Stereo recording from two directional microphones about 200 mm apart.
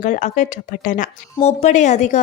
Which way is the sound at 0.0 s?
40° left (ahead or behind).